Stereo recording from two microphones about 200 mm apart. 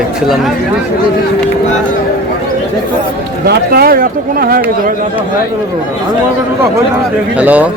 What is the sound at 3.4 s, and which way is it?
Speech, 50° right (ahead or behind).